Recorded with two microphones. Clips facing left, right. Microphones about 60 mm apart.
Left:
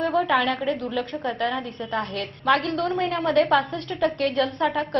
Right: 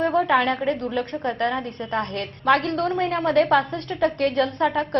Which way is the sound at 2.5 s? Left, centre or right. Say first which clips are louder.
Right 2 dB; right.